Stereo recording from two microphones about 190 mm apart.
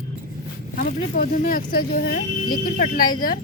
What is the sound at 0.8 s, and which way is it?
Speech, 50° left (ahead or behind).